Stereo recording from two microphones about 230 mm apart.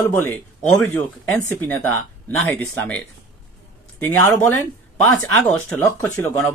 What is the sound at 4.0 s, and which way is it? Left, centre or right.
Speech, centre.